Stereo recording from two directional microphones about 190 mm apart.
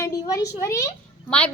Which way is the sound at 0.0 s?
15° left (ahead or behind).